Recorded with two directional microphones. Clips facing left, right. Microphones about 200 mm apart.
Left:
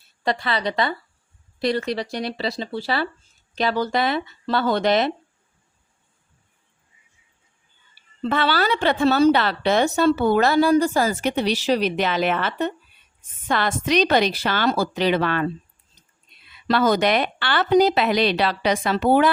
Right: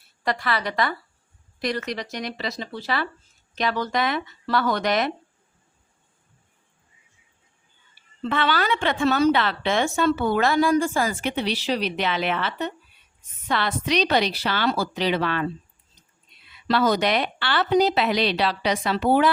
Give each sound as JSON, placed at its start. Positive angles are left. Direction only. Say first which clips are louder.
{"t": 0.2, "sound": "a woman's voice", "louder": "left 2 dB", "side_deg": 25}
{"t": 8.2, "sound": "a woman's voice", "louder": "left 2 dB", "side_deg": 35}
{"t": 16.6, "sound": "speech", "louder": "left 2 dB", "side_deg": 50}